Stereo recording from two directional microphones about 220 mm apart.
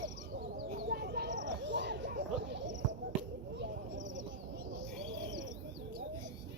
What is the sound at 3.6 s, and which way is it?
Bird, 55° right (ahead or behind).